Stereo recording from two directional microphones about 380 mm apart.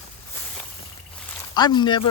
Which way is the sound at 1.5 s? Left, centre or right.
Centre.